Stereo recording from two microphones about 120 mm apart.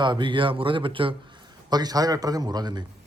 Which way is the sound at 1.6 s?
35° right (ahead or behind).